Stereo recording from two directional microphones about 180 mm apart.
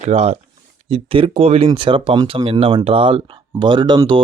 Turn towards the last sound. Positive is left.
turn(degrees=-25)  # may be behind; listen again after turning